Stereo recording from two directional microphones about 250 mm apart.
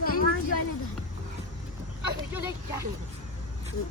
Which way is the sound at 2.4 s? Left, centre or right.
Centre.